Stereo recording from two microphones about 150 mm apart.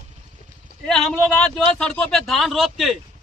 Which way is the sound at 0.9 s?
5° left (ahead or behind).